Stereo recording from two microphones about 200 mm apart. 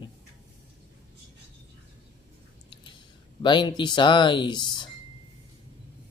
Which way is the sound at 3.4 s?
25° left (ahead or behind).